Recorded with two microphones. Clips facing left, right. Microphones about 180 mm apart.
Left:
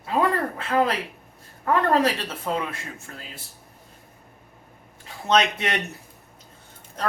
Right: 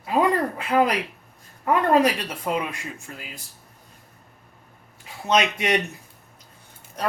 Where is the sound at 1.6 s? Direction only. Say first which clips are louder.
Right 2 dB; 15° right (ahead or behind).